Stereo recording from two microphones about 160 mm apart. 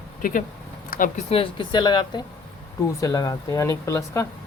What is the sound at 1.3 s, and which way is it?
Speech, 35° left (ahead or behind).